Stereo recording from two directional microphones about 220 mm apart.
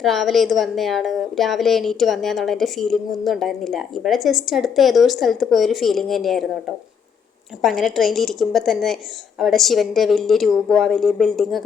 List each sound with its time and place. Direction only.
0.0 s a woman's voice: centre (ahead or behind)
7.6 s a woman's voice: centre (ahead or behind)